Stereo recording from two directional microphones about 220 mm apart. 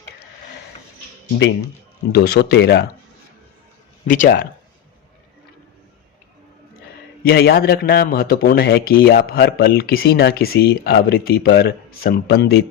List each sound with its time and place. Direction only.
2.1 s a man's voice: 45° left (ahead or behind)
4.0 s speech: 35° left (ahead or behind)
7.3 s a man's voice: 45° left (ahead or behind)